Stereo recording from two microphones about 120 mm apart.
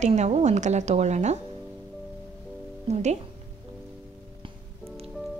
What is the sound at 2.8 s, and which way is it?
Speech, 65° right (ahead or behind).